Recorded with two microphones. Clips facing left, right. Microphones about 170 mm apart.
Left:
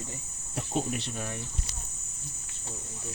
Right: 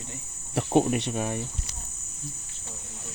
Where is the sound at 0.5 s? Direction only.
70° right (ahead or behind).